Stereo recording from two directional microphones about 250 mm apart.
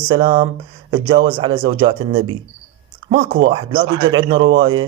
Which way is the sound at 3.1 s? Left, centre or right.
Right.